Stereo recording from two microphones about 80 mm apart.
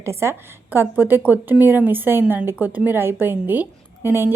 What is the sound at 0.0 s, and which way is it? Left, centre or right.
A woman's voice, right.